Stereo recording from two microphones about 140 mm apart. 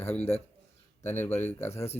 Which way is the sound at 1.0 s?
15° left (ahead or behind).